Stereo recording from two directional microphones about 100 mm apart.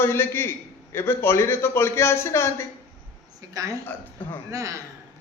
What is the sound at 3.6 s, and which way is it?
Speech, 35° right (ahead or behind).